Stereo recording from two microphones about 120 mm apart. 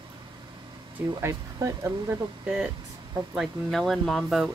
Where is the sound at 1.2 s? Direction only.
20° right (ahead or behind).